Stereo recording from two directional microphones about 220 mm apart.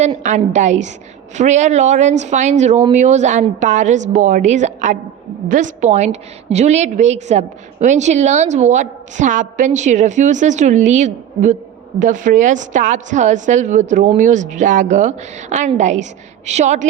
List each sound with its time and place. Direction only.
0.0 s a woman's voice: 30° right (ahead or behind)